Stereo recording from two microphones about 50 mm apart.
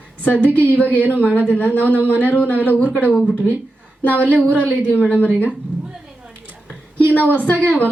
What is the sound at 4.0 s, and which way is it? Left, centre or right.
A woman's voice, left.